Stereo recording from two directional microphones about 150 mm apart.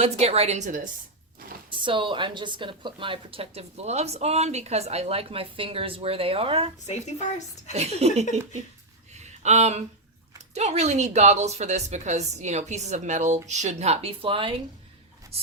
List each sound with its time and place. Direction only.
0.0 s speech: 45° right (ahead or behind)
1.7 s speech: 35° right (ahead or behind)
6.8 s a woman's voice: 50° left (ahead or behind)
7.7 s speech: 45° right (ahead or behind)
9.1 s a sound: 50° right (ahead or behind)
10.5 s speech: 45° right (ahead or behind)